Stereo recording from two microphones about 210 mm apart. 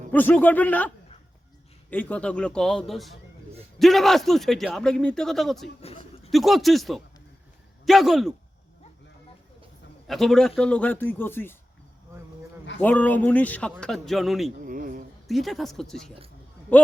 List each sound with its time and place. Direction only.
0.1 s speech: 10° left (ahead or behind)
1.9 s speech: 10° left (ahead or behind)
5.8 s a sound: 30° left (ahead or behind)
6.3 s speech: centre (ahead or behind)
10.1 s speech: centre (ahead or behind)
12.8 s speech: 10° left (ahead or behind)
14.6 s a sound: 40° right (ahead or behind)
15.3 s speech: centre (ahead or behind)